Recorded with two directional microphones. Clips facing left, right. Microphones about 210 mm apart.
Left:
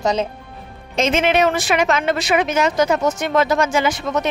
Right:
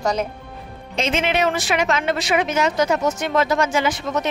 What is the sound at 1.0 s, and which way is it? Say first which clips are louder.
Speech: left 4 dB; 45° left (ahead or behind).